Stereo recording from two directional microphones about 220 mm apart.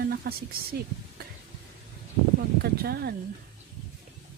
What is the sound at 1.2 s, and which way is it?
Stir, 45° right (ahead or behind).